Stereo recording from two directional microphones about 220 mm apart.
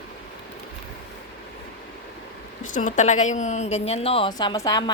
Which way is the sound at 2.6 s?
35° left (ahead or behind).